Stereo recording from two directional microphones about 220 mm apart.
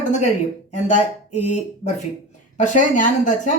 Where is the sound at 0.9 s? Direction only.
90° left.